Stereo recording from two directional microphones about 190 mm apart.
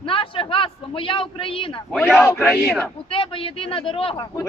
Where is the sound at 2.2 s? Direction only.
15° left (ahead or behind).